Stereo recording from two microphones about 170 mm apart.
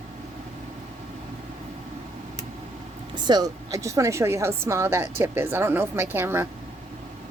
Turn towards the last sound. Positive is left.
turn(degrees=-15)  # may be behind; listen again after turning